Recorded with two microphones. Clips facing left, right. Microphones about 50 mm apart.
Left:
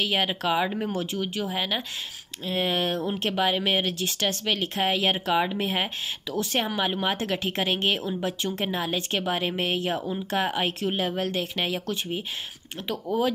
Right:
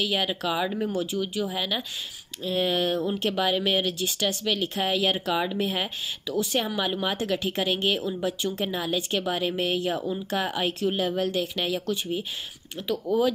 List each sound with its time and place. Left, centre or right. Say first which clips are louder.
0.0 s speech: left 1 dB; left